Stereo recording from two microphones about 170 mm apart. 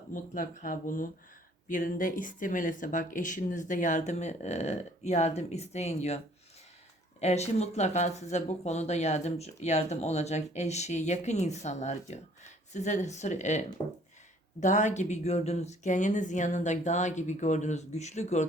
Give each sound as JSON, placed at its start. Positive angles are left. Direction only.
{"t": 0.1, "sound": "speech", "side_deg": 50}
{"t": 7.2, "sound": "speech", "side_deg": 40}
{"t": 13.8, "sound": "speech", "side_deg": 30}
{"t": 14.6, "sound": "speech", "side_deg": 45}